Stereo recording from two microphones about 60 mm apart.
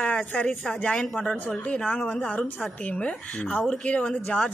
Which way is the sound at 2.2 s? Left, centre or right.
Left.